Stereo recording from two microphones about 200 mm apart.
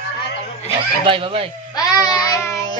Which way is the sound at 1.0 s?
25° right (ahead or behind).